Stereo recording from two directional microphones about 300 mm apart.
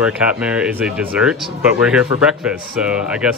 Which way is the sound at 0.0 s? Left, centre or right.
Centre.